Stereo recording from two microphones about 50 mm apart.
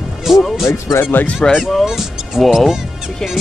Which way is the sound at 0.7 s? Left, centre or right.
Left.